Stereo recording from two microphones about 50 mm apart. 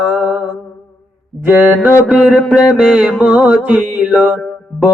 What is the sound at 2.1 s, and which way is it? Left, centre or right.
Mantra, right.